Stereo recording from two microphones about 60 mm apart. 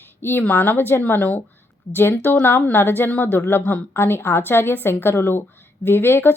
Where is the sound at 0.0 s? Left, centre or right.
Left.